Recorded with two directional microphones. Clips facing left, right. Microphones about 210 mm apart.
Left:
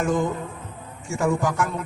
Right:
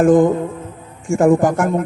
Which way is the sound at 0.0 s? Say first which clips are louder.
Right 12 dB; 50° right (ahead or behind).